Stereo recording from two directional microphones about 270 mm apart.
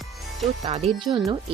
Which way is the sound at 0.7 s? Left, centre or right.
Centre.